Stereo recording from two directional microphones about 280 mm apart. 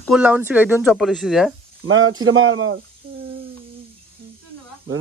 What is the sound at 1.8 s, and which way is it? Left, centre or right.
Speech, right.